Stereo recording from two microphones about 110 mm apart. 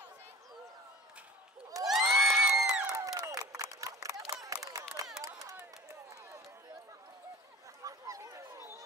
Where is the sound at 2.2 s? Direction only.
Centre (ahead or behind).